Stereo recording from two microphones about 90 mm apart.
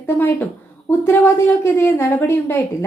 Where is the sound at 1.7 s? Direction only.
25° left (ahead or behind).